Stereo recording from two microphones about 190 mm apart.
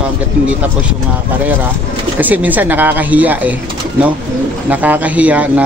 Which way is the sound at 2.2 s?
10° right (ahead or behind).